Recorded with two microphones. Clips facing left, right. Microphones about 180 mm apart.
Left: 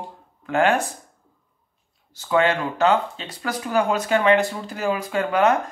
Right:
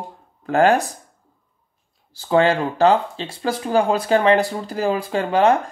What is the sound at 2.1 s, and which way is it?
Speech, 30° right (ahead or behind).